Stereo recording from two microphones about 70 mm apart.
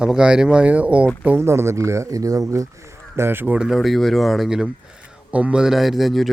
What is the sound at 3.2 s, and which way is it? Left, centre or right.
Speech, right.